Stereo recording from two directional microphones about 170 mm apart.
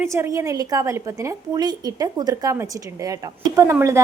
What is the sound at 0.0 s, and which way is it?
A woman's voice, 15° right (ahead or behind).